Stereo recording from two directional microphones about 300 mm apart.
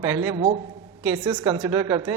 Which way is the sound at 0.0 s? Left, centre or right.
Centre.